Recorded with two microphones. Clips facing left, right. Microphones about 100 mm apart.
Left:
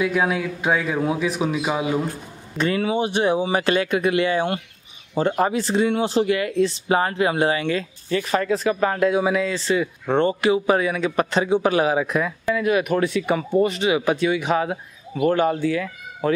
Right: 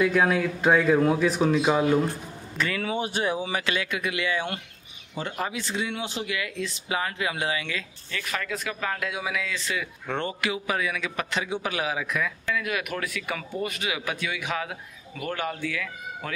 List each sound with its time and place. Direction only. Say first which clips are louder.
0.0 s speech: left 1 dB; 5° left (ahead or behind)
2.5 s speech: left 7 dB; 25° left (ahead or behind)